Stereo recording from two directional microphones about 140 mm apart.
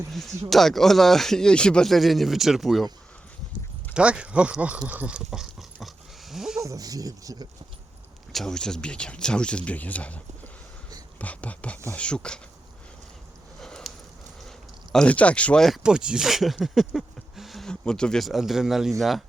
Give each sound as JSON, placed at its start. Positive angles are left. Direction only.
{"t": 0.5, "sound": "speech", "side_deg": 0}
{"t": 3.9, "sound": "speech", "side_deg": -10}
{"t": 4.9, "sound": "dog", "side_deg": -10}
{"t": 6.6, "sound": "speech", "side_deg": -25}
{"t": 8.3, "sound": "speech", "side_deg": 0}
{"t": 11.2, "sound": "speech", "side_deg": 10}
{"t": 13.6, "sound": "a sound", "side_deg": 5}
{"t": 14.9, "sound": "speech", "side_deg": 10}